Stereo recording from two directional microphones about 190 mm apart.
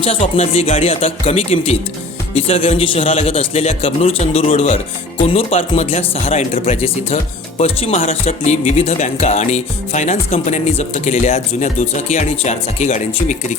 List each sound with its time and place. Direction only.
0.0 s speech: 30° left (ahead or behind)